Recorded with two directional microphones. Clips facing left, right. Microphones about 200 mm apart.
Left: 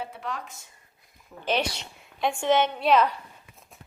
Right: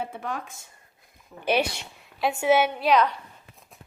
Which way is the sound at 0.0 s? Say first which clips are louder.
Right 2 dB; 50° right (ahead or behind).